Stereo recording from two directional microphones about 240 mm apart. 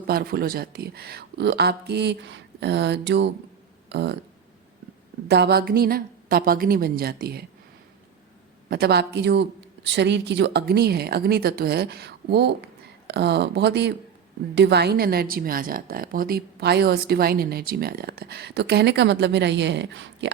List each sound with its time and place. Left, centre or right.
0.1 s a woman's voice: right
5.3 s a woman's voice: right
8.7 s a woman's voice: right